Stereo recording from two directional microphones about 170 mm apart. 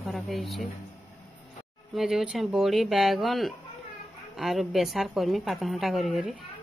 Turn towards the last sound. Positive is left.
turn(degrees=0)  # may be behind; listen again after turning